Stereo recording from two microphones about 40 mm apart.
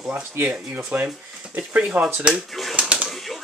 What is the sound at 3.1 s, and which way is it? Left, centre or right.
Typewriter, centre.